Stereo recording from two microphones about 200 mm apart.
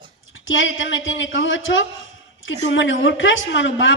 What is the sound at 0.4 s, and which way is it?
Speech, 75° left (ahead or behind).